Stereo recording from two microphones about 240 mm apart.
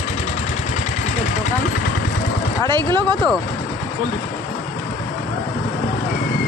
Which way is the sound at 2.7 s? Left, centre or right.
Centre.